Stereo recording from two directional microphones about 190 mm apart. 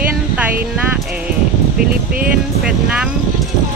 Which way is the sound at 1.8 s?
50° right (ahead or behind).